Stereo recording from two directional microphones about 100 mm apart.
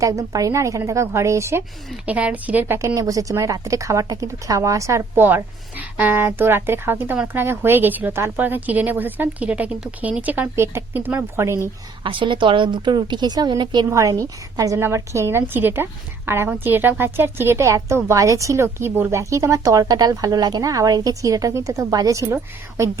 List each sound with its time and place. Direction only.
0.0 s a woman's voice: 35° right (ahead or behind)
2.0 s a woman's voice: 15° right (ahead or behind)
12.0 s a woman's voice: 55° right (ahead or behind)
13.9 s a woman's voice: 35° right (ahead or behind)